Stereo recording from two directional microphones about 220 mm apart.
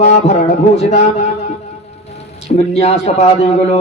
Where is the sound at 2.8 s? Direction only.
30° left (ahead or behind).